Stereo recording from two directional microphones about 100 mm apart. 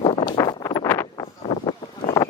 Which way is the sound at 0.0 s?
60° left (ahead or behind).